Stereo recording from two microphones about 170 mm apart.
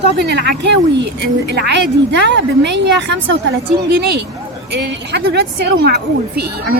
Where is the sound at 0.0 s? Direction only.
80° right.